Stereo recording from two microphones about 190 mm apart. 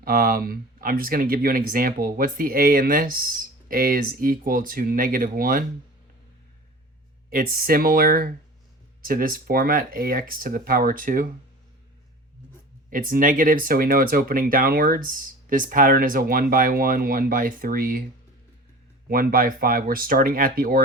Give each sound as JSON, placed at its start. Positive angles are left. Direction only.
{"t": 0.0, "sound": "speech", "side_deg": -50}
{"t": 7.3, "sound": "speech", "side_deg": -50}
{"t": 12.9, "sound": "speech", "side_deg": -45}
{"t": 19.0, "sound": "speech", "side_deg": -50}